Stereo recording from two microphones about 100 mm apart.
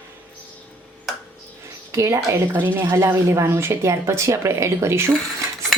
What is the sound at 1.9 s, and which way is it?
A woman's voice, 30° right (ahead or behind).